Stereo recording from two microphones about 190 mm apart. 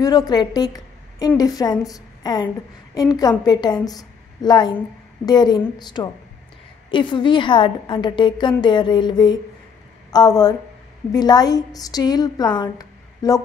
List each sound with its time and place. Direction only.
0.0 s a woman's voice: 20° left (ahead or behind)